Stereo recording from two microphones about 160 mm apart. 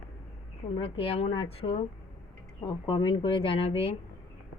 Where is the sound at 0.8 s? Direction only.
35° left (ahead or behind).